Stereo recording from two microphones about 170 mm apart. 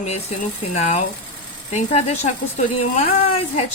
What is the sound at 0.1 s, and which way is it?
A woman's voice, 40° left (ahead or behind).